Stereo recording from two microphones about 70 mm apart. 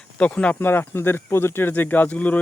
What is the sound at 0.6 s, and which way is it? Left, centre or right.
Speech, left.